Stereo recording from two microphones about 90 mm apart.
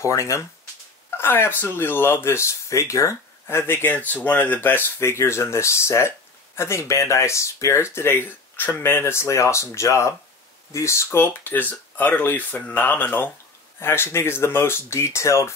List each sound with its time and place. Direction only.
0.0 s speech: 35° left (ahead or behind)